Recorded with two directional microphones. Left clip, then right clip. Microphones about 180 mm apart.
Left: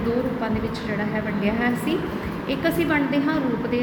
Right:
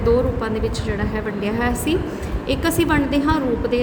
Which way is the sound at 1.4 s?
50° right (ahead or behind).